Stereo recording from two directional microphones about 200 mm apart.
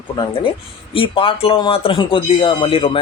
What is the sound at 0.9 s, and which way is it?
Speech, 25° left (ahead or behind).